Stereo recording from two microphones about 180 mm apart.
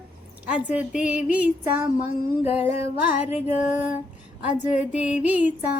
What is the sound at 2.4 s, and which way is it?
Music, 35° left (ahead or behind).